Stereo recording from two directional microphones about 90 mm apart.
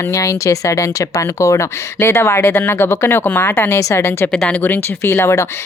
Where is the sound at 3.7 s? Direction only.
30° left (ahead or behind).